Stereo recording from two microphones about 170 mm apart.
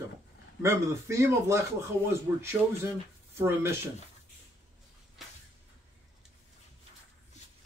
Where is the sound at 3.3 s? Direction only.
15° right (ahead or behind).